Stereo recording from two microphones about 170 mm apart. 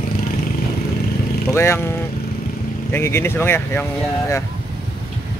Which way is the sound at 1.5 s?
15° left (ahead or behind).